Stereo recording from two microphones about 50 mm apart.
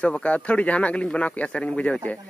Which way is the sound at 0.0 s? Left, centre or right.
Left.